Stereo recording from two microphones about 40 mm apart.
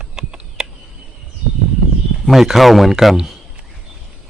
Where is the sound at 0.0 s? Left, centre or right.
Centre.